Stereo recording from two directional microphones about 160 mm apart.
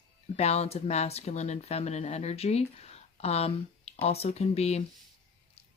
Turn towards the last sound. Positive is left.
turn(degrees=40)  # may be behind; listen again after turning